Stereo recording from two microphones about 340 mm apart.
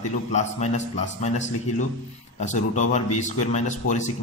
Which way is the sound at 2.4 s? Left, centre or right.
Left.